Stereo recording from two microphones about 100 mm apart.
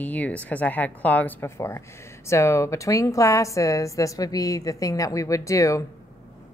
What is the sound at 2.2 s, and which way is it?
A woman's voice, 30° left (ahead or behind).